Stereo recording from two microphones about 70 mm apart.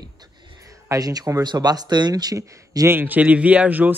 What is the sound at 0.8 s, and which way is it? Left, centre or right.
Speech, right.